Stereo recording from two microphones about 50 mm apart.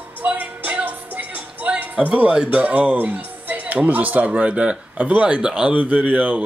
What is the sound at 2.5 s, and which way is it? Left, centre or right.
Speech, right.